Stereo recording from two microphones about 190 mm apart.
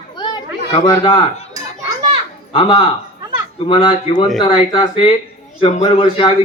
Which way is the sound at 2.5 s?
25° left (ahead or behind).